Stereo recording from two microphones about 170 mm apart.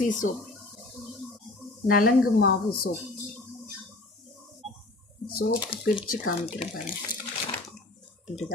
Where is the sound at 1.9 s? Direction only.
60° left (ahead or behind).